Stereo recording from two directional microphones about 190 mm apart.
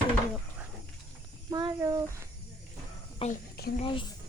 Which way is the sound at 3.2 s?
30° left (ahead or behind).